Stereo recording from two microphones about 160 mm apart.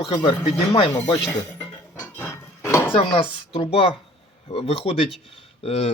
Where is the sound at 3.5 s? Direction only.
35° left (ahead or behind).